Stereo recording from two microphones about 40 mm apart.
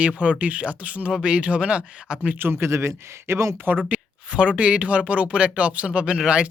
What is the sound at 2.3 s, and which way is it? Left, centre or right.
Speech, right.